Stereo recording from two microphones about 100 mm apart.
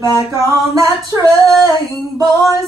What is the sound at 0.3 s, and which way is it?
Male singing, 35° right (ahead or behind).